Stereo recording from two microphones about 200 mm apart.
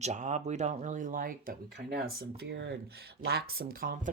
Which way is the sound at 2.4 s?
55° right (ahead or behind).